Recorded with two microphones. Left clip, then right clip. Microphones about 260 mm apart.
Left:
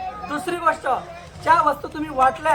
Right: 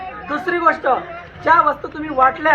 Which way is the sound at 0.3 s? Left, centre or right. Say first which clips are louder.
Right 5 dB; left.